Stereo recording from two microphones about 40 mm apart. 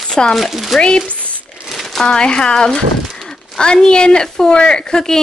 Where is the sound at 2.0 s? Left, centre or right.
Left.